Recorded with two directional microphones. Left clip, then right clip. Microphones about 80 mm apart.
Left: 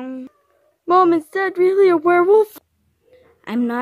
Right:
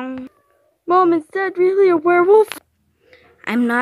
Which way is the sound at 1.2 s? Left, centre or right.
Left.